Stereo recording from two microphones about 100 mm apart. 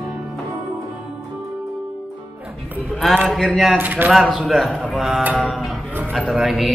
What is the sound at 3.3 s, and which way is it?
Speech, centre (ahead or behind).